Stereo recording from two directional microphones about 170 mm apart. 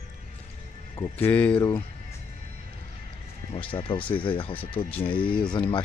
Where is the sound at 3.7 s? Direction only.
30° left (ahead or behind).